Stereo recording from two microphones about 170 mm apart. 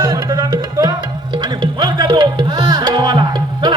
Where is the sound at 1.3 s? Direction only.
25° right (ahead or behind).